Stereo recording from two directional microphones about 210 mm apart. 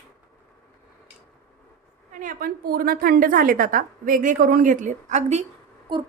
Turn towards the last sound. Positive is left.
turn(degrees=-25)  # may be behind; listen again after turning